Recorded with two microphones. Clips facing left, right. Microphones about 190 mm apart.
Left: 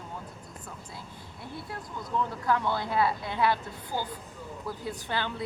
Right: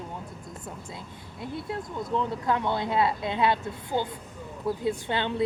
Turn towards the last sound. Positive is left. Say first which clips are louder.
# right 5 dB
turn(degrees=-20)  # may be behind; listen again after turning